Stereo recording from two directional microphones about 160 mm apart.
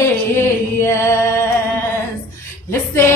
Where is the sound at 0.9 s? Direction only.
15° left (ahead or behind).